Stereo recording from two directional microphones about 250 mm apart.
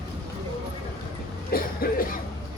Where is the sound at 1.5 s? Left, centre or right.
Left.